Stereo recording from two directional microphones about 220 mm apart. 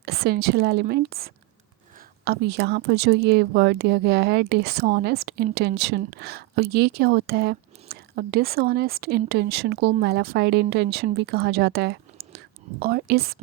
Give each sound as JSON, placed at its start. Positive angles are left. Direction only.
{"t": 0.0, "sound": "speech", "side_deg": -45}